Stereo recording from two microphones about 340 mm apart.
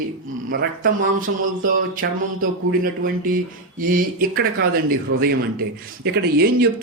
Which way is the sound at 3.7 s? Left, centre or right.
Right.